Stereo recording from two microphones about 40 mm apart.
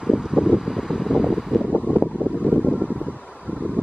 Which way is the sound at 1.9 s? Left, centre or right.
Right.